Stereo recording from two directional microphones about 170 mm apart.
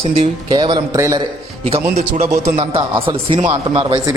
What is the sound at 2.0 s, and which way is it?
Speech, 45° right (ahead or behind).